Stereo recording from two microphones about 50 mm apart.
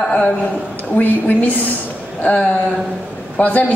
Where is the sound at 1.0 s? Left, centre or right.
Left.